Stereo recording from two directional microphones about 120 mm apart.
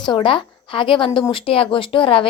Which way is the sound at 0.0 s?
40° left (ahead or behind).